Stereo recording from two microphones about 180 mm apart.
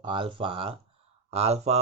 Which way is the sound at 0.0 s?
30° right (ahead or behind).